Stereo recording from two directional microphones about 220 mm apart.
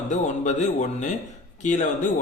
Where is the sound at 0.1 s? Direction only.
35° left (ahead or behind).